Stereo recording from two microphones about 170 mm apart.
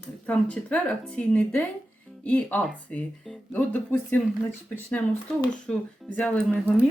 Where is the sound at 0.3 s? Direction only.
10° left (ahead or behind).